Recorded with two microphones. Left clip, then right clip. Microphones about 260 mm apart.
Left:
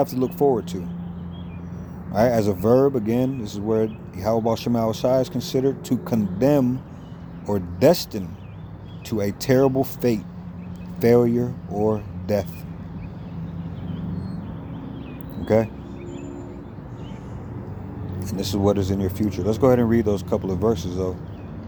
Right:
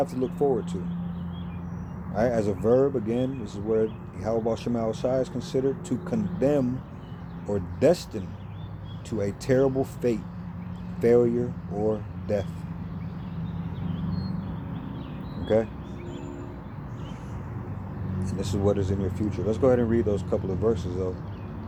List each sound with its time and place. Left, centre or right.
0.0 s speech: left
2.1 s speech: left
15.4 s speech: left
18.2 s speech: left